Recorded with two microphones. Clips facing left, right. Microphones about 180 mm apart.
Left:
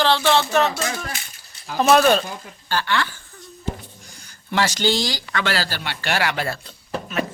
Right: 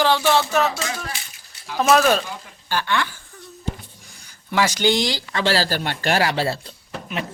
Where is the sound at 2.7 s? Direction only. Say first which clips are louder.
Even; 15° right (ahead or behind).